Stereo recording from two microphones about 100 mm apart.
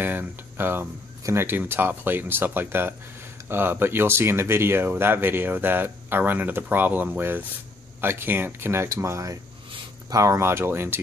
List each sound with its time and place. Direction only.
0.0 s speech: 20° right (ahead or behind)